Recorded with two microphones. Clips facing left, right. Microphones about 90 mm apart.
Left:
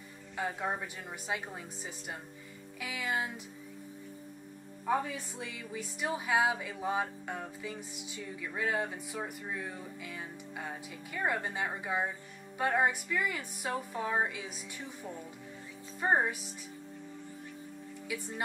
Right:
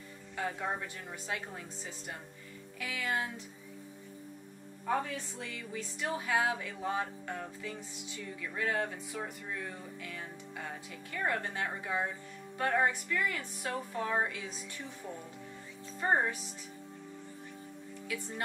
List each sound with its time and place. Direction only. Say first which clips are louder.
0.4 s speech: left 1 dB; 15° left (ahead or behind)
4.8 s speech: left 1 dB; 10° left (ahead or behind)
15.0 s speech: even; 5° left (ahead or behind)